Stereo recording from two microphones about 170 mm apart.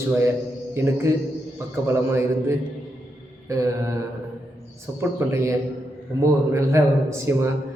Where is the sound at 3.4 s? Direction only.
20° right (ahead or behind).